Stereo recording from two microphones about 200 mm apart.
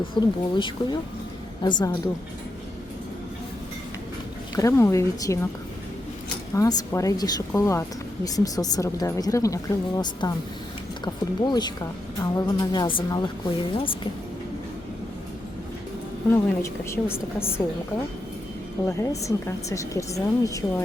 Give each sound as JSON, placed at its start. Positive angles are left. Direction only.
{"t": 0.2, "sound": "a woman's voice", "side_deg": 20}
{"t": 4.5, "sound": "speech", "side_deg": 15}
{"t": 6.5, "sound": "a woman's voice", "side_deg": 15}
{"t": 16.3, "sound": "speech", "side_deg": 10}
{"t": 18.9, "sound": "speech", "side_deg": 15}